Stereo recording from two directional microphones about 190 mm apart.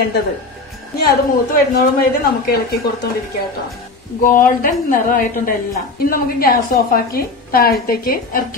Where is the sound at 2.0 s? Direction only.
50° left (ahead or behind).